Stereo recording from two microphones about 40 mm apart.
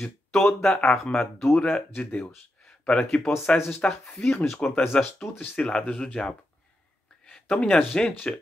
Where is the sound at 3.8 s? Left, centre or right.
Left.